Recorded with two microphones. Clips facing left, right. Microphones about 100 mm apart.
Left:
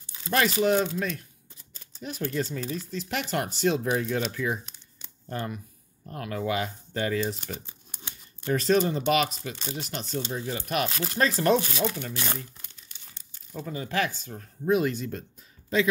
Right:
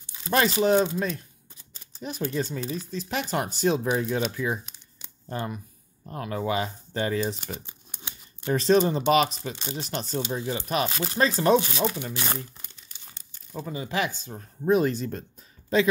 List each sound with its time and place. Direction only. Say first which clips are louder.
0.0 s a sound: right 2 dB; 20° right (ahead or behind)
0.6 s speech: right 2 dB; 30° right (ahead or behind)
4.6 s a sound: right 1 dB; 10° right (ahead or behind)
5.3 s speech: right 1 dB; 20° right (ahead or behind)
8.5 s speech: right 2 dB; 25° right (ahead or behind)
13.5 s speech: right 1 dB; 15° right (ahead or behind)
14.7 s speech: right 2 dB; 35° right (ahead or behind)